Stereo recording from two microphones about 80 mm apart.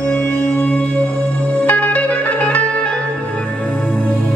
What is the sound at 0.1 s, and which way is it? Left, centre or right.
Music, centre.